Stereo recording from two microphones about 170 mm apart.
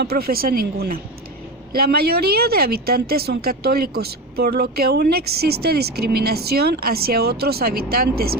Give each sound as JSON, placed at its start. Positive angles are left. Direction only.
{"t": 0.0, "sound": "a woman's voice", "side_deg": -65}